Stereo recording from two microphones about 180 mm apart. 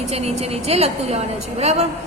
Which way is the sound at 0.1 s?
35° right (ahead or behind).